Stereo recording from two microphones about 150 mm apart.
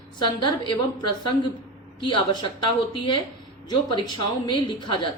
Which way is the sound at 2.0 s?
30° left (ahead or behind).